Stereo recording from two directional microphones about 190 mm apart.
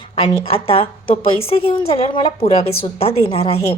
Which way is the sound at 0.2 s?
30° left (ahead or behind).